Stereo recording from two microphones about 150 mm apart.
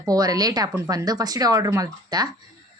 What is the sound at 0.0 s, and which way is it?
Speech, 25° right (ahead or behind).